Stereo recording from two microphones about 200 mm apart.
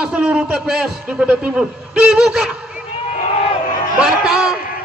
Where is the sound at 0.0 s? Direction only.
5° right (ahead or behind).